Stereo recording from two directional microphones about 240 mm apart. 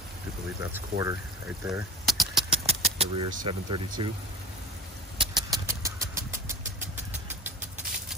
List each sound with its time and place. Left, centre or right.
0.7 s speech: centre
2.0 s a sound: centre
2.5 s speech: right
5.2 s vehicle: centre